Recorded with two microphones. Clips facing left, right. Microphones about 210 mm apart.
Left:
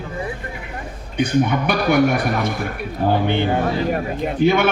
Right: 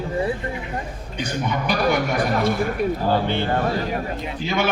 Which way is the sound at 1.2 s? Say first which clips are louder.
Left 7 dB; 60° left (ahead or behind).